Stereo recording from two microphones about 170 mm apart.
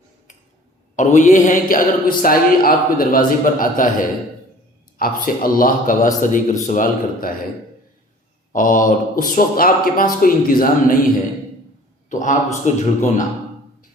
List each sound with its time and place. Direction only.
0.9 s speech: 45° left (ahead or behind)
4.9 s speech: 60° left (ahead or behind)
8.5 s a man's voice: 50° left (ahead or behind)